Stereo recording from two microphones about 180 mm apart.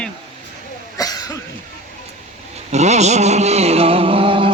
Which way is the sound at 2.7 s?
40° right (ahead or behind).